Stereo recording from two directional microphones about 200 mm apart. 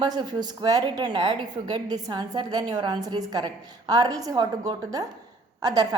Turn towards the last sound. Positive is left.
turn(degrees=-20)  # may be behind; listen again after turning